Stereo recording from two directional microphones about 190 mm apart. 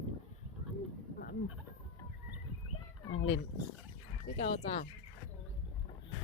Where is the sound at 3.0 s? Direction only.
90° left.